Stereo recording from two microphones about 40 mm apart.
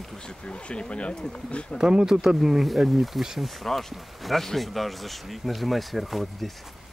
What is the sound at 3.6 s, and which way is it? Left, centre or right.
Speech, centre.